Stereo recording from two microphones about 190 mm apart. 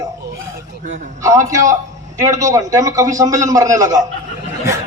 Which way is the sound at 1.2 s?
15° right (ahead or behind).